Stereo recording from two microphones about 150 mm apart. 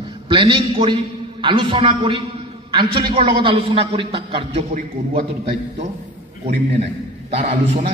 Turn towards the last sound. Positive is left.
turn(degrees=-60)  # may be behind; listen again after turning